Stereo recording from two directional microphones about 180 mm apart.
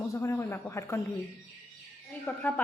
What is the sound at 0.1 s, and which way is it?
Speech, 15° left (ahead or behind).